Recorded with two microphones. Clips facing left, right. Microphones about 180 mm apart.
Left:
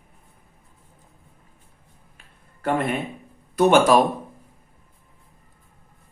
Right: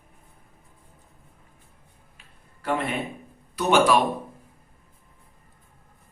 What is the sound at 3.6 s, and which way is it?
Speech, 50° left (ahead or behind).